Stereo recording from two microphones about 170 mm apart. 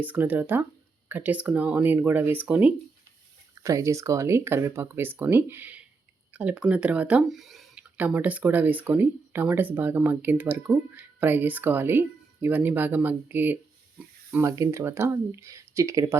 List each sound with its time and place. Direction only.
0.0 s speech: 10° right (ahead or behind)